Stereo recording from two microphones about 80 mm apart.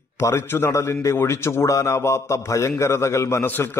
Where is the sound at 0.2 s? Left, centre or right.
Left.